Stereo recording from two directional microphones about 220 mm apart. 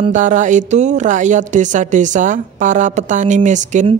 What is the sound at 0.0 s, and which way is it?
Speech, 35° right (ahead or behind).